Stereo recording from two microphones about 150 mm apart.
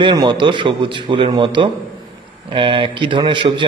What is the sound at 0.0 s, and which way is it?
A man's voice, 30° right (ahead or behind).